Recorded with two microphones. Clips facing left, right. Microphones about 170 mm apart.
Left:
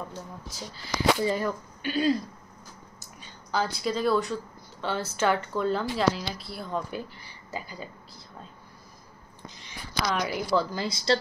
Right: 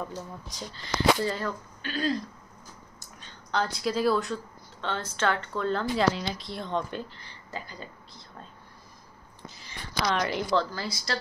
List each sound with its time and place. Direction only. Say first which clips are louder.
0.5 s speech: left 1 dB; 5° left (ahead or behind)
3.2 s speech: even; 5° left (ahead or behind)
9.6 s a woman's voice: even; 5° left (ahead or behind); by 11.1 s 20° left (ahead or behind)